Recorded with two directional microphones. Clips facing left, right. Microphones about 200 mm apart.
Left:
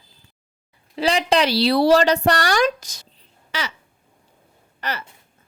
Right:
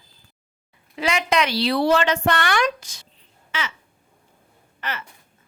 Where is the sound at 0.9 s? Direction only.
30° left (ahead or behind).